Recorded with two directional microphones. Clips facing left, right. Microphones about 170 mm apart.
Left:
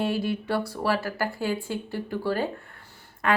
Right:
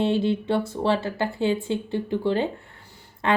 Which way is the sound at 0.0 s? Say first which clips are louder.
Right 4 dB; 25° right (ahead or behind).